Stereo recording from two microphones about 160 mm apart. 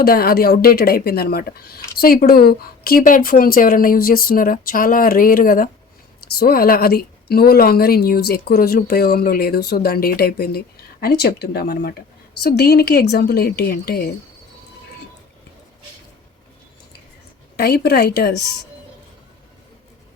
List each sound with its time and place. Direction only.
0.0 s a woman's voice: 70° left (ahead or behind)
17.6 s a woman's voice: 80° left